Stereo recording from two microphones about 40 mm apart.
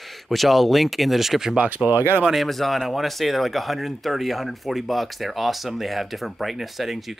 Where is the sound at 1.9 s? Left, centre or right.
Right.